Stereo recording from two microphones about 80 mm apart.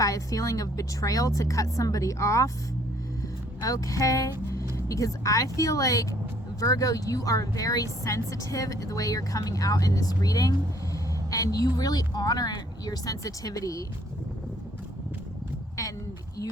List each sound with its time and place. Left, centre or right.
0.0 s speech: left
3.6 s speech: left